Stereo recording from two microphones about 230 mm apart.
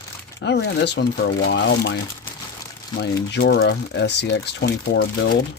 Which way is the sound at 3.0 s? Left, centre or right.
Left.